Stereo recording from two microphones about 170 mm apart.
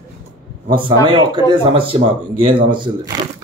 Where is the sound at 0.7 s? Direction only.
30° right (ahead or behind).